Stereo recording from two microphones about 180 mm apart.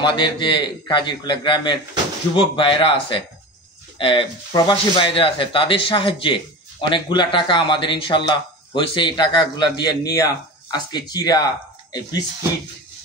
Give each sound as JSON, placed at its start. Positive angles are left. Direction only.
{"t": 0.0, "sound": "speech", "side_deg": 25}